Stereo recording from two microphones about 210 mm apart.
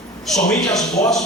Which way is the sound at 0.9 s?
15° left (ahead or behind).